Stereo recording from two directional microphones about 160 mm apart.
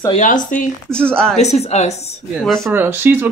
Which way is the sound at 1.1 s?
5° left (ahead or behind).